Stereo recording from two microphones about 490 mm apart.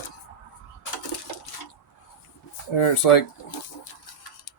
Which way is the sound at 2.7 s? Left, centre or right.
Left.